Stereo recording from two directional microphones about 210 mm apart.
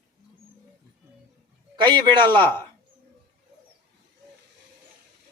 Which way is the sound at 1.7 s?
20° right (ahead or behind).